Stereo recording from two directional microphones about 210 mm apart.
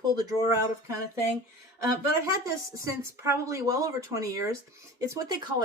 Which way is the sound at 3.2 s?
15° right (ahead or behind).